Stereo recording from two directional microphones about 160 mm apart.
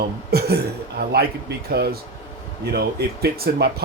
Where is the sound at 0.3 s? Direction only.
85° right.